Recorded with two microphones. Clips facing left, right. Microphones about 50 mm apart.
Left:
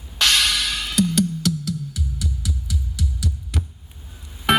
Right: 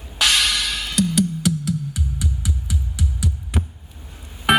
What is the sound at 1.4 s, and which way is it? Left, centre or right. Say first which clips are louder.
Music: right 2 dB; right.